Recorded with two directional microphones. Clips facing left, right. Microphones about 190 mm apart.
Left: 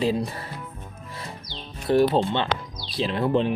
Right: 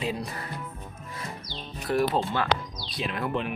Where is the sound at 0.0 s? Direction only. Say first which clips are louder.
Left 7 dB; 30° left (ahead or behind).